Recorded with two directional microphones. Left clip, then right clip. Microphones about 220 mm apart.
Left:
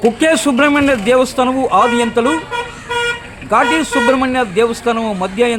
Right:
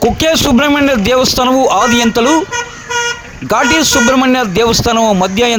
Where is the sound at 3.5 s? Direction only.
45° right (ahead or behind).